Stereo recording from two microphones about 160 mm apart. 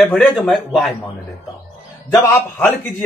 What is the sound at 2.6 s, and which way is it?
Speech, 10° left (ahead or behind).